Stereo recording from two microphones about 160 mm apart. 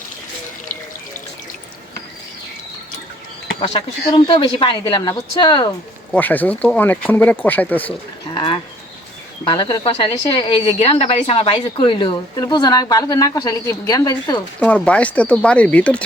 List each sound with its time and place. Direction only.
3.6 s a woman's voice: 25° left (ahead or behind)
6.1 s speech: 10° left (ahead or behind)
9.4 s speech: 30° left (ahead or behind)
14.6 s speech: 5° left (ahead or behind)